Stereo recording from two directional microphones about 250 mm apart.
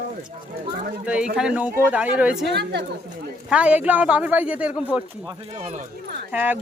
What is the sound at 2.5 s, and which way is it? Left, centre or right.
Speech, right.